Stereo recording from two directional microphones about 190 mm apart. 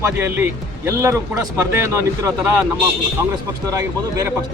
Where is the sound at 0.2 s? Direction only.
10° right (ahead or behind).